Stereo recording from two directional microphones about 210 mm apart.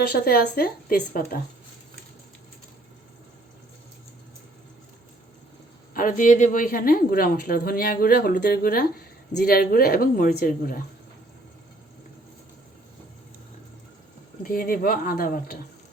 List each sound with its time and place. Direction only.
0.1 s a woman's voice: 50° left (ahead or behind)
5.9 s a woman's voice: 40° left (ahead or behind)
14.4 s a woman's voice: 45° left (ahead or behind)